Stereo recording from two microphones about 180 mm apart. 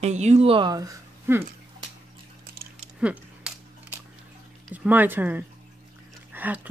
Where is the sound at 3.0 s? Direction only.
5° right (ahead or behind).